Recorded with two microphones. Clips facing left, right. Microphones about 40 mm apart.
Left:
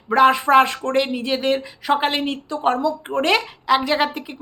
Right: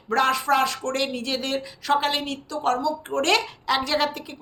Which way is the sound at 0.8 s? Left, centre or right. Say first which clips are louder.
Left 6 dB; centre.